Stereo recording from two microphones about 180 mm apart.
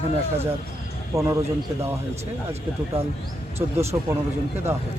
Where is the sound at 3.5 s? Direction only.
15° right (ahead or behind).